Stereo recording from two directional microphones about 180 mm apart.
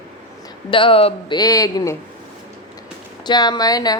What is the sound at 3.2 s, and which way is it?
Speech, 25° left (ahead or behind).